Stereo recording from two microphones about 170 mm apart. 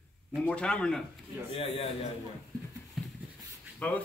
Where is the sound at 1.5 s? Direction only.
35° left (ahead or behind).